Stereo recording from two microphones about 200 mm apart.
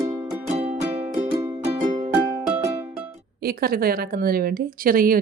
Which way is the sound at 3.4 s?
50° right (ahead or behind).